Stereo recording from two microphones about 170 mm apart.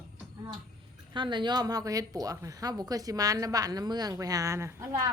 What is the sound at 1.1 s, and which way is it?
A woman's voice, 30° right (ahead or behind).